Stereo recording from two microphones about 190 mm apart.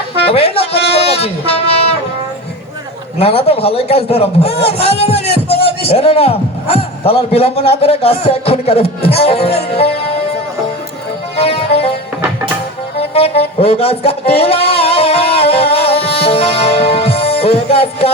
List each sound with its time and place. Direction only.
0.3 s music: 30° left (ahead or behind)
3.2 s a man's voice: 30° left (ahead or behind)
11.3 s music: 30° left (ahead or behind)
13.0 s music: 30° left (ahead or behind)
13.6 s a sound: 30° left (ahead or behind)